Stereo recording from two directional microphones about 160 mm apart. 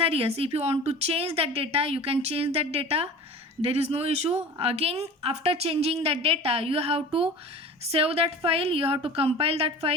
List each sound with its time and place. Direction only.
0.0 s speech: 35° right (ahead or behind)